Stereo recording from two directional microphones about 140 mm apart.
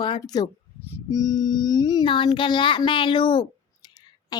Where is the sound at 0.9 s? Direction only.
25° left (ahead or behind).